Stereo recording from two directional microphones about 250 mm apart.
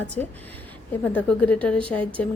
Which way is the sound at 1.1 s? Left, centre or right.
Centre.